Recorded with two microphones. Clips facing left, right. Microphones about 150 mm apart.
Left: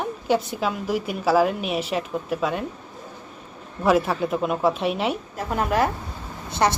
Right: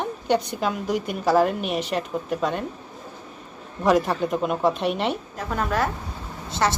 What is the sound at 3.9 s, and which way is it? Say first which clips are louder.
A woman's voice: even; 5° left (ahead or behind).